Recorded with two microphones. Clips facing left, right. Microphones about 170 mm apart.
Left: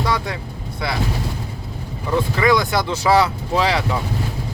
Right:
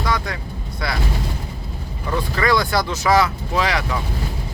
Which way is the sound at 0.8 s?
25° left (ahead or behind).